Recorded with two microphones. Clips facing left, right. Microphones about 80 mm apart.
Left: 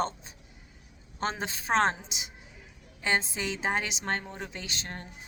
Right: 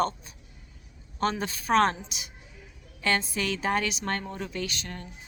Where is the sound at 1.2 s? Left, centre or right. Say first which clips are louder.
Right 4 dB; left.